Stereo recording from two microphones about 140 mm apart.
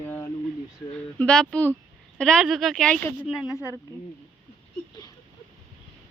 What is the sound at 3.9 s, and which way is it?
Speech, 25° right (ahead or behind).